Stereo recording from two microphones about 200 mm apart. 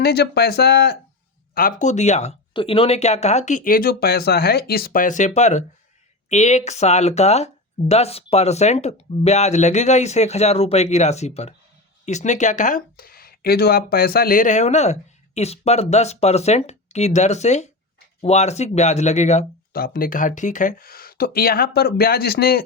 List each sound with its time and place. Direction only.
0.0 s speech: 55° left (ahead or behind)
1.5 s speech: 40° left (ahead or behind)
19.7 s speech: 50° left (ahead or behind)